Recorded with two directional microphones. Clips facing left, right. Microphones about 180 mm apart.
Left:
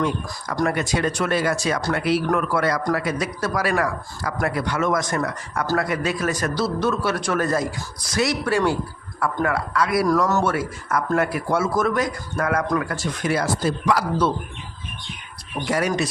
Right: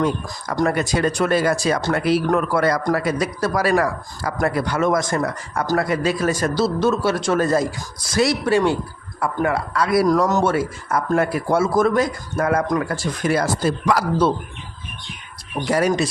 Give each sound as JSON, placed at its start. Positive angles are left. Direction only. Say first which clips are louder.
{"t": 0.7, "sound": "speech", "louder": "right 3 dB", "side_deg": -40}
{"t": 10.1, "sound": "speech", "louder": "right 2 dB", "side_deg": -20}
{"t": 12.9, "sound": "speech", "louder": "right 3 dB", "side_deg": -40}
{"t": 15.6, "sound": "speech", "louder": "right 3 dB", "side_deg": -5}